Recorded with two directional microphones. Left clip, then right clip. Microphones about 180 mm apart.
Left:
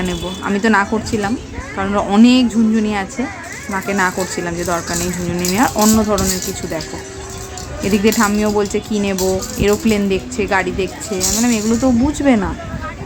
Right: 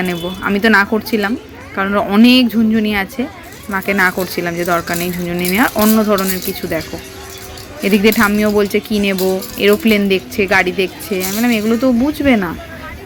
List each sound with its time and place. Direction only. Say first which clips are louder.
0.0 s speech: right 3 dB; 10° right (ahead or behind)
7.8 s speech: right 3 dB; 15° right (ahead or behind)